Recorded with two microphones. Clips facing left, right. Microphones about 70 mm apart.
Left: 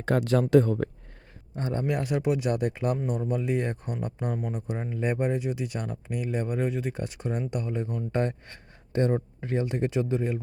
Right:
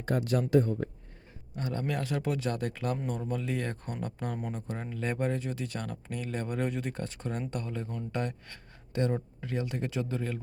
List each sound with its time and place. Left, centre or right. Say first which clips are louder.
0.0 s speech: left 5 dB; left
1.5 s speech: left 5 dB; left
4.4 s speech: left 4 dB; centre
4.7 s speech: left 6 dB; centre
8.1 s speech: left 7 dB; left